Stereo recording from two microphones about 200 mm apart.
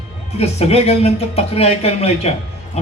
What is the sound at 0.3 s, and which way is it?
A man's voice, 30° left (ahead or behind).